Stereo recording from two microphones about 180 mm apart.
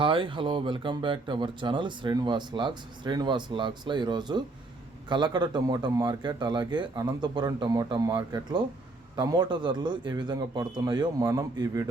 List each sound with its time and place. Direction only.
0.0 s speech: 30° right (ahead or behind)